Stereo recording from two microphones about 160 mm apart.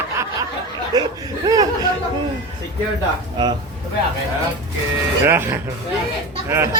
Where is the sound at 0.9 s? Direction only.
25° right (ahead or behind).